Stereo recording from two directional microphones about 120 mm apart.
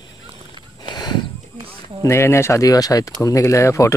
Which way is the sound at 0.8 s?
40° left (ahead or behind).